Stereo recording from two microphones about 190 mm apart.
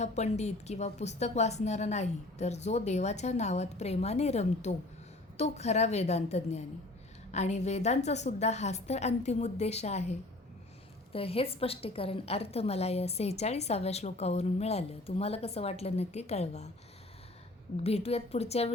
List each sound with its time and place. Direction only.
0.0 s a woman's voice: 35° left (ahead or behind)
17.8 s a woman's voice: 30° left (ahead or behind)